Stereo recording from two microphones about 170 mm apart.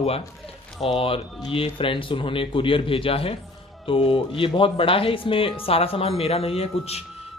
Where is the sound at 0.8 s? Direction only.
35° left (ahead or behind).